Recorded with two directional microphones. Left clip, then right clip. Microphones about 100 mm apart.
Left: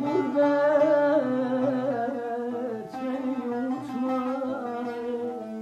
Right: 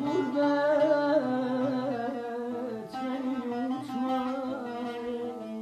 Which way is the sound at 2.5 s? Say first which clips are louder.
Left 3 dB; 30° left (ahead or behind).